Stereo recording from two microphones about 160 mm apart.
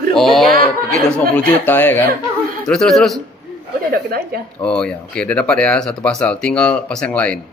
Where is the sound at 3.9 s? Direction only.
70° right (ahead or behind).